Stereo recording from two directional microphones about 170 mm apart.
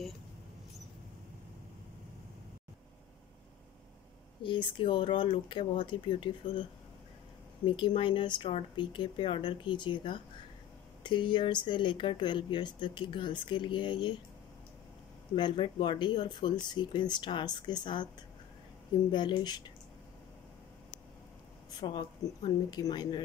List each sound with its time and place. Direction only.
4.4 s speech: 30° left (ahead or behind)
7.6 s speech: 30° left (ahead or behind)
15.3 s speech: 30° left (ahead or behind)
19.0 s speech: 25° left (ahead or behind)
21.6 s speech: 25° left (ahead or behind)